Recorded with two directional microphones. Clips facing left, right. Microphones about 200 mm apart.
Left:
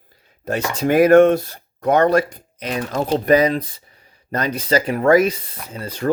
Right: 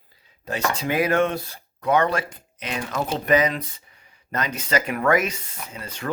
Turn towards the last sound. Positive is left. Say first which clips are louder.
# left 8 dB
turn(degrees=35)  # may be behind; listen again after turning